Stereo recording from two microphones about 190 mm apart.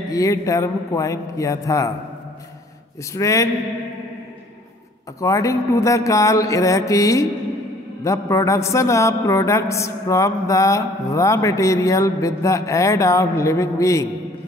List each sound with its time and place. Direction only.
0.1 s speech: 20° left (ahead or behind)
3.2 s speech: 15° left (ahead or behind)
5.2 s speech: 15° left (ahead or behind)